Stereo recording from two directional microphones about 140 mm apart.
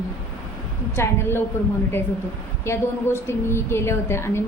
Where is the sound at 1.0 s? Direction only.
15° left (ahead or behind).